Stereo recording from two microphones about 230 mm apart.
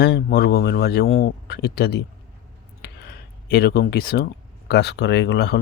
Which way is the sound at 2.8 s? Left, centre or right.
Left.